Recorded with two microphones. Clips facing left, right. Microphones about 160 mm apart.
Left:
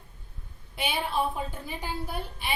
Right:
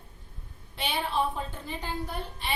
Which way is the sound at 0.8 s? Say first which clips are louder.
Even; 10° left (ahead or behind).